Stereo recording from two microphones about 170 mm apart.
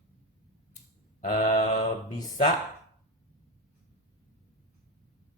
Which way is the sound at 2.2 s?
25° left (ahead or behind).